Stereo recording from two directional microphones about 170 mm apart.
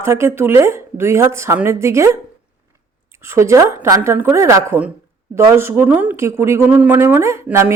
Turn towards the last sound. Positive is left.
turn(degrees=-15)  # may be behind; listen again after turning